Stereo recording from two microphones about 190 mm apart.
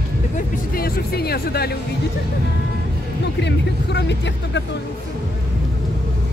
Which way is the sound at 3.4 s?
65° left (ahead or behind).